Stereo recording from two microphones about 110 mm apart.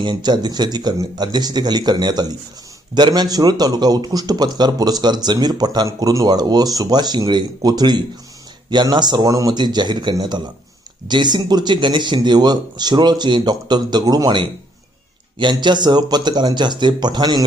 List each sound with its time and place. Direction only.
0.0 s a man's voice: 40° right (ahead or behind)